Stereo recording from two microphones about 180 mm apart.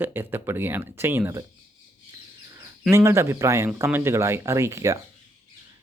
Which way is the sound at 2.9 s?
15° right (ahead or behind).